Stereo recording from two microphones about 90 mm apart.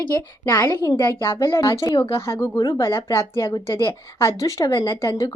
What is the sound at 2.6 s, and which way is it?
Speech, 40° left (ahead or behind).